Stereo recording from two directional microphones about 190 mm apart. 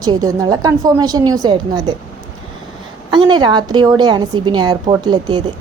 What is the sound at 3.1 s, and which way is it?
Speech, 25° right (ahead or behind).